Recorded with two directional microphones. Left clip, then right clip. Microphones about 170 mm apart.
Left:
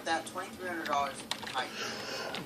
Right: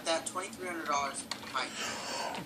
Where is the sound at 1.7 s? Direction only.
35° right (ahead or behind).